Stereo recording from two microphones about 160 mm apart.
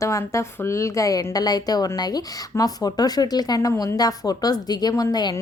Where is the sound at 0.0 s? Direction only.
20° left (ahead or behind).